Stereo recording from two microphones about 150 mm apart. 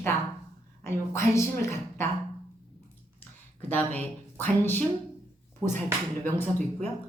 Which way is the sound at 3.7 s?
10° left (ahead or behind).